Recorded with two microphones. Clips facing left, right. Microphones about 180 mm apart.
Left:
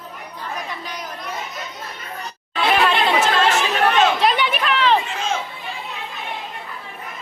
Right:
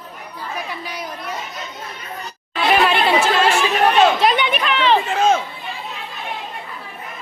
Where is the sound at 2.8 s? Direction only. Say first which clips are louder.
Right 2 dB; 10° right (ahead or behind).